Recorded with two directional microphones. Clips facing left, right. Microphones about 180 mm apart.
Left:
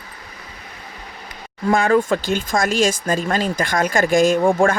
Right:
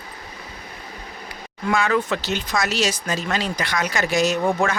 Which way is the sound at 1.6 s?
45° left (ahead or behind).